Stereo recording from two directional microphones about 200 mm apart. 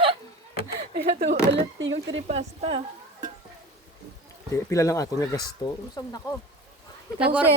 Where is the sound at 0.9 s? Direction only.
55° right (ahead or behind).